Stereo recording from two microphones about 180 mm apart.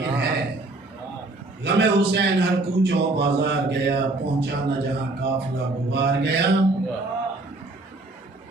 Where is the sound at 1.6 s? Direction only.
70° right (ahead or behind).